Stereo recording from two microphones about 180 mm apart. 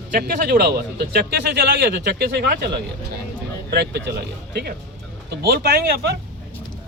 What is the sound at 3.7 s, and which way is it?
Speech, 70° right (ahead or behind).